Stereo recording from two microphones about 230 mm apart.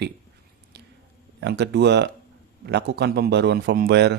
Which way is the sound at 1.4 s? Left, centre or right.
Right.